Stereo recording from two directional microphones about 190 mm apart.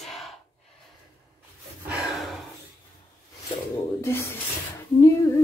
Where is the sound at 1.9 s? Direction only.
Centre (ahead or behind).